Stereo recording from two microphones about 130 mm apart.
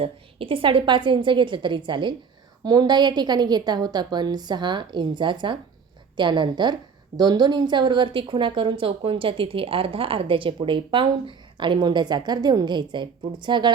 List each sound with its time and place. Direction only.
0.0 s a woman's voice: 45° right (ahead or behind)